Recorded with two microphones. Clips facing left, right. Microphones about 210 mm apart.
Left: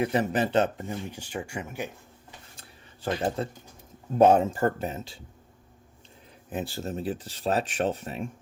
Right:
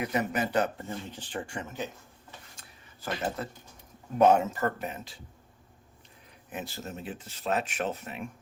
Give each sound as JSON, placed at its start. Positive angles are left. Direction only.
{"t": 0.0, "sound": "speech", "side_deg": 30}
{"t": 2.6, "sound": "a sound", "side_deg": 30}
{"t": 4.2, "sound": "speech", "side_deg": 30}
{"t": 6.5, "sound": "speech", "side_deg": 30}